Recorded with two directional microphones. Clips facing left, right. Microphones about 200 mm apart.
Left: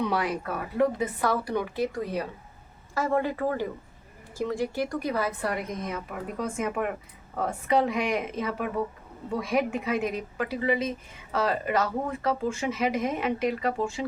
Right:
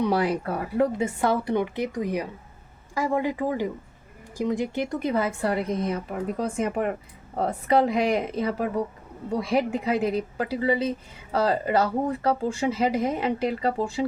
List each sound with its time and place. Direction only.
0.1 s a woman's voice: 30° right (ahead or behind)